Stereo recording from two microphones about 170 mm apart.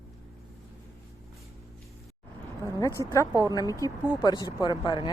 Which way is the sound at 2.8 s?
20° left (ahead or behind).